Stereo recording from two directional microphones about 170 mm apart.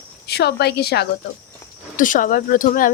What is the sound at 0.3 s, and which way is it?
Speech, 75° left (ahead or behind).